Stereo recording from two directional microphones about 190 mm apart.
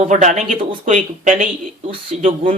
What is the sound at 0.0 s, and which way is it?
Speech, 40° right (ahead or behind).